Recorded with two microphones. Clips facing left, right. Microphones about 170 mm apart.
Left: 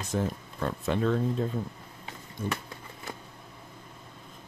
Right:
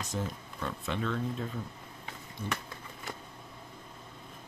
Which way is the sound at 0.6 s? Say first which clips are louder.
Left 7 dB; 40° left (ahead or behind).